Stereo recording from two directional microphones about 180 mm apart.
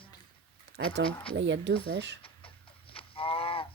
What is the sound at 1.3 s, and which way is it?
Speech, 85° right.